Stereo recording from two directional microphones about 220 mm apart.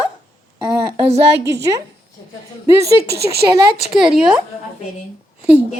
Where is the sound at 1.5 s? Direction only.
15° right (ahead or behind).